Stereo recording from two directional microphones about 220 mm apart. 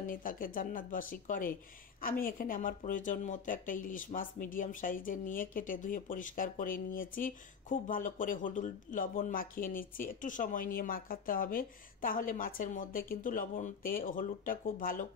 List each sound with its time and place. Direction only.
0.0 s speech: 40° left (ahead or behind)